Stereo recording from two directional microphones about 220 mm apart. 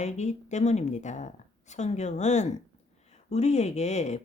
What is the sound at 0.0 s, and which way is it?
Speech, 30° left (ahead or behind).